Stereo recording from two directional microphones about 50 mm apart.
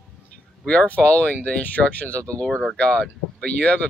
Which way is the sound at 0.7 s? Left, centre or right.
Left.